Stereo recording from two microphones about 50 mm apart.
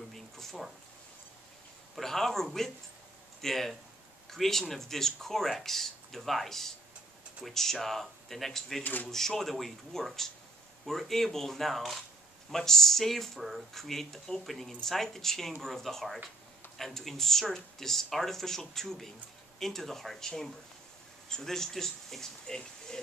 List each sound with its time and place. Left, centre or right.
0.1 s a sound: centre
2.0 s speech: centre
8.8 s speech: left
9.1 s speech: centre